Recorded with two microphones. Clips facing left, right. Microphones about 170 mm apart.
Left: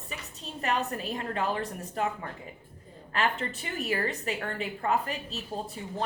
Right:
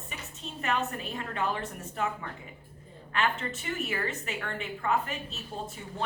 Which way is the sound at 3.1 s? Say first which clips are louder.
Left 1 dB; 35° left (ahead or behind).